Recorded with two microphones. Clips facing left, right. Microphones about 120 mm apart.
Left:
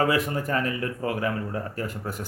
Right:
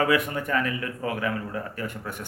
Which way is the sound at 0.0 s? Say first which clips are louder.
Even; 35° left (ahead or behind).